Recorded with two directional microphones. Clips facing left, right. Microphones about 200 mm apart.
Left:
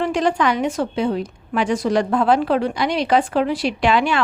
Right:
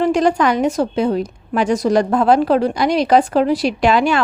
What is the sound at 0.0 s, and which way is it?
A woman's voice, 40° right (ahead or behind).